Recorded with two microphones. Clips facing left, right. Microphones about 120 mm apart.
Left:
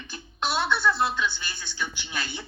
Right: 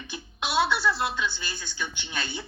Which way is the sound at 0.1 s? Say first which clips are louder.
Even; 10° right (ahead or behind).